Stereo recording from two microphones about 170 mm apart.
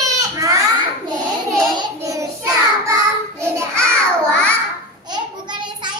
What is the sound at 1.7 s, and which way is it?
Child singing, 20° right (ahead or behind).